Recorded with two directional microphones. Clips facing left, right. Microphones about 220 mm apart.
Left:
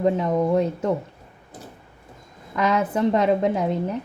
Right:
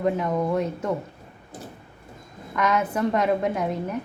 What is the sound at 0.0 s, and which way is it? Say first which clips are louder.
Speech: left 3 dB; 30° left (ahead or behind).